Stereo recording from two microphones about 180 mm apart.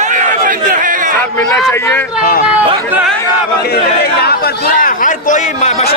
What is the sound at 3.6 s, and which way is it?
Speech, 60° left (ahead or behind).